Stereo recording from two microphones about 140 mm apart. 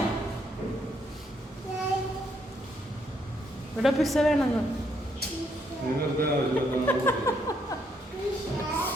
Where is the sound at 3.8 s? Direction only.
Centre (ahead or behind).